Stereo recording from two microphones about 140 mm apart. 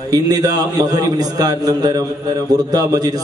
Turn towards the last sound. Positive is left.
turn(degrees=-25)  # may be behind; listen again after turning